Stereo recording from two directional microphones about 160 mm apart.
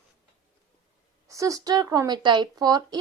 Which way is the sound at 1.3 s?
20° right (ahead or behind).